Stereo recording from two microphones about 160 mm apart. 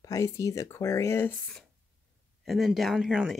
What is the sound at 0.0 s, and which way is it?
Speech, 20° left (ahead or behind).